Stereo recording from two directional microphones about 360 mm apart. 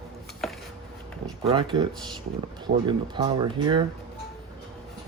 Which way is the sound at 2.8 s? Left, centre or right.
Centre.